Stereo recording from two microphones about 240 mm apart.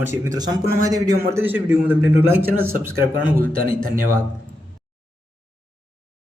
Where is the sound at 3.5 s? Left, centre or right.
Right.